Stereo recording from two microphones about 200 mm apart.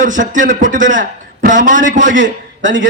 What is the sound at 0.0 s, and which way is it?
A man's voice, 40° right (ahead or behind).